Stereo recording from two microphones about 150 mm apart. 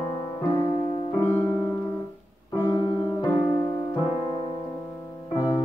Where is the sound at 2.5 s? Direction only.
20° left (ahead or behind).